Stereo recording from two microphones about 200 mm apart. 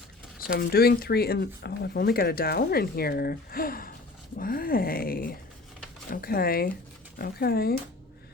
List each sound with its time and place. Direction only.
0.4 s speech: 50° left (ahead or behind)